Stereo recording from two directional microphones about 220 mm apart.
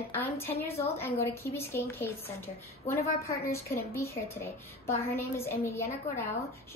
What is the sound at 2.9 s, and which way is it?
Speech, 45° left (ahead or behind).